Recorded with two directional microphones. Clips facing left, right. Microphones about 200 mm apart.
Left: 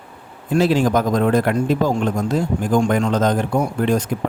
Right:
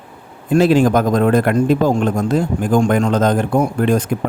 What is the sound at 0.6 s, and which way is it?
A man's voice, 50° right (ahead or behind).